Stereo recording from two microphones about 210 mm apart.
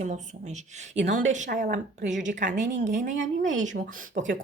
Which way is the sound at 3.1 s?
60° right (ahead or behind).